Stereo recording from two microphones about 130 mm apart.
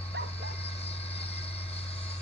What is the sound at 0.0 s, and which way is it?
Vehicle, 50° left (ahead or behind).